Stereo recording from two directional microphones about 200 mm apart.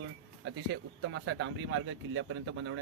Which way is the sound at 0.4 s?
60° right (ahead or behind).